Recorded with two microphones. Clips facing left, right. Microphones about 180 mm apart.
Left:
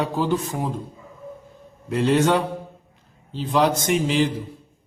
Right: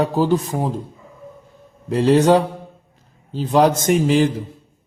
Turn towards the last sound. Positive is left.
turn(degrees=-45)  # may be behind; listen again after turning